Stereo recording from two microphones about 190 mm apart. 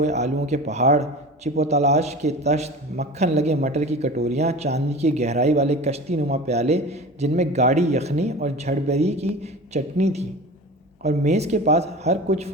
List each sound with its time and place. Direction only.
0.0 s a man's voice: 35° right (ahead or behind)